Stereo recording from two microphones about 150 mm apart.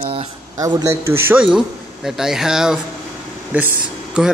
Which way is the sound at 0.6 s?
25° right (ahead or behind).